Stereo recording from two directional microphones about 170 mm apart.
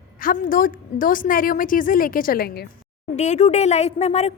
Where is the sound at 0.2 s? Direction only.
55° left (ahead or behind).